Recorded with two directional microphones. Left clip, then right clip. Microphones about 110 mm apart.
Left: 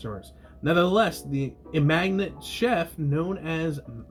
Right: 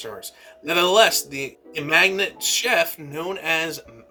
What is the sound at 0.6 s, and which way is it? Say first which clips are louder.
Speech: right 5 dB; 25° right (ahead or behind).